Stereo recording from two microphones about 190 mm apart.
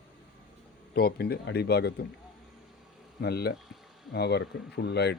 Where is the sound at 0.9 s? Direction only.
55° left (ahead or behind).